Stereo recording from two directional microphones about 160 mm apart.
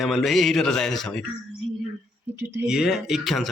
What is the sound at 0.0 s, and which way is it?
Speech, centre (ahead or behind).